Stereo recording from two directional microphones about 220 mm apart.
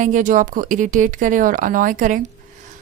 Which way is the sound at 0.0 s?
35° right (ahead or behind).